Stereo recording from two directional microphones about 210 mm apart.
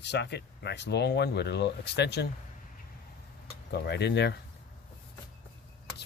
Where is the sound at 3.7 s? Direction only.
50° left (ahead or behind).